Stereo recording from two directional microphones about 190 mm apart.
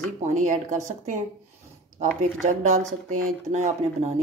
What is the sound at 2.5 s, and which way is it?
Speech, 40° right (ahead or behind).